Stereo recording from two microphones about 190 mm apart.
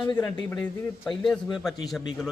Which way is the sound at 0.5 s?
5° left (ahead or behind).